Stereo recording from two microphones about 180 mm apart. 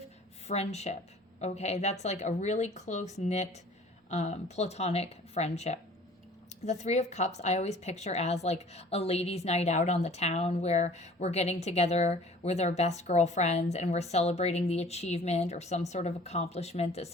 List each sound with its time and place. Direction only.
0.4 s a woman's voice: 35° left (ahead or behind)